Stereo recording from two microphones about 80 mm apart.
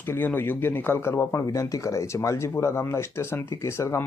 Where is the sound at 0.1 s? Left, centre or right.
Left.